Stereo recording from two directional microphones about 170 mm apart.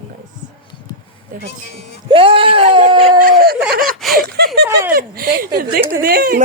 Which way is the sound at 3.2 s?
55° right (ahead or behind).